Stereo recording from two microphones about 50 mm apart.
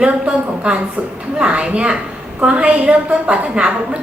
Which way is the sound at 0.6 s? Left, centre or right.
Right.